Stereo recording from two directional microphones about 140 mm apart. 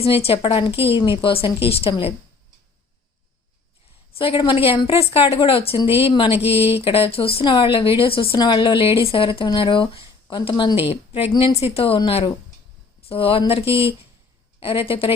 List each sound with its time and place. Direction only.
0.0 s speech: 45° left (ahead or behind)
4.2 s speech: 40° left (ahead or behind)